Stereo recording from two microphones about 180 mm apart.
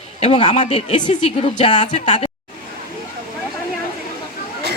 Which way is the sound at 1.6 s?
25° left (ahead or behind).